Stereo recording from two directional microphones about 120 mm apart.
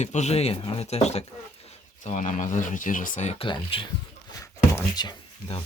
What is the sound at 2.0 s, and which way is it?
Speech, 80° left.